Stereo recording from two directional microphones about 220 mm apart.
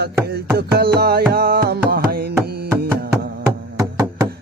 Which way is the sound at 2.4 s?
45° right (ahead or behind).